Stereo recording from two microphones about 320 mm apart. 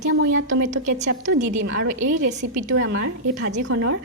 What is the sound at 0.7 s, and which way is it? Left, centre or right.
Speech, right.